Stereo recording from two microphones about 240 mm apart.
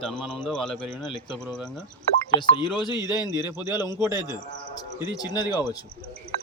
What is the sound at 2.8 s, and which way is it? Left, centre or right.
Speech, centre.